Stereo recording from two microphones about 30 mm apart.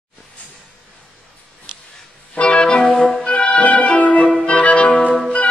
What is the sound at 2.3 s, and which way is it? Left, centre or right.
Music, left.